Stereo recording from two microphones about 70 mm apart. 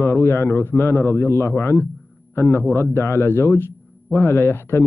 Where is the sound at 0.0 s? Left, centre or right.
Left.